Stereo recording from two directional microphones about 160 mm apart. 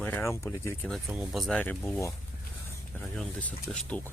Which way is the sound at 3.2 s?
5° left (ahead or behind).